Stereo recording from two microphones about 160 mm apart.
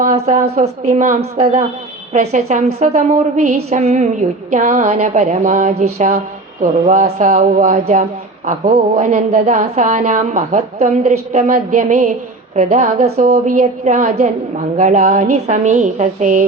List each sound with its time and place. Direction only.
0.0 s a woman's voice: 45° right (ahead or behind)